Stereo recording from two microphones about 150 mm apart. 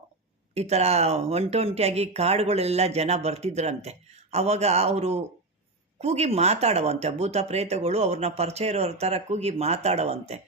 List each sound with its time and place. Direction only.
0.5 s speech: 45° right (ahead or behind)